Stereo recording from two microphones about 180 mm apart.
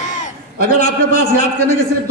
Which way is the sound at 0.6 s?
40° left (ahead or behind).